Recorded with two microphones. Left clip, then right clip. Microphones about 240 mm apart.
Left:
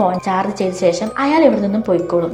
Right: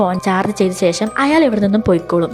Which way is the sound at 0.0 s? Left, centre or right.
Right.